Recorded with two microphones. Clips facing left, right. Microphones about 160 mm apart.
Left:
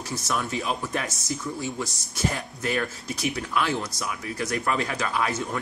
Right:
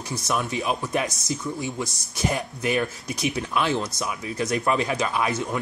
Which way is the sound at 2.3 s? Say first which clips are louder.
Right 3 dB; 20° right (ahead or behind).